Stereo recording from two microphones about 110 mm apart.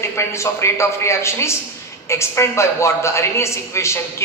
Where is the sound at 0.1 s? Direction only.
25° left (ahead or behind).